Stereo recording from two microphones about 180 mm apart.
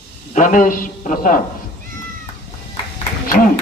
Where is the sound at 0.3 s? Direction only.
45° left (ahead or behind).